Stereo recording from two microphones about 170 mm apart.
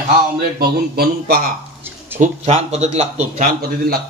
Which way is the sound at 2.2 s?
40° right (ahead or behind).